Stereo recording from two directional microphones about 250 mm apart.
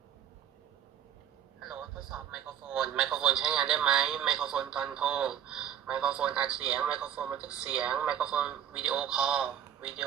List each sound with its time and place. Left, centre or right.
1.6 s a man's voice: centre